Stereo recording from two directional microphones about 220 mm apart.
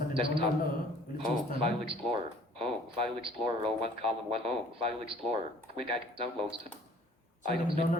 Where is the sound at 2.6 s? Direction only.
25° right (ahead or behind).